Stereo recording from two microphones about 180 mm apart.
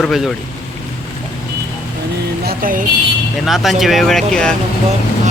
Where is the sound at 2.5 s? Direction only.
50° right (ahead or behind).